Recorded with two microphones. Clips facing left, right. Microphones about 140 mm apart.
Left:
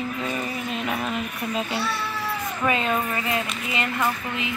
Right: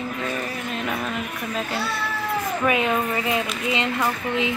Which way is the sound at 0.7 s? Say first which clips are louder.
Even; 5° left (ahead or behind).